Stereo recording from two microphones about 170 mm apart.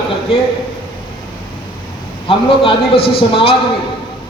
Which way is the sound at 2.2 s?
30° left (ahead or behind).